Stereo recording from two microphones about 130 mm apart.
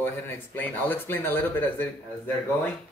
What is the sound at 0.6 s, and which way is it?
Speech, 15° left (ahead or behind).